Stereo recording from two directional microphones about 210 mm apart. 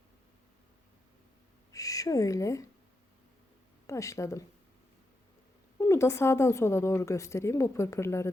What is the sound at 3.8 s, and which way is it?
Speech, 15° left (ahead or behind).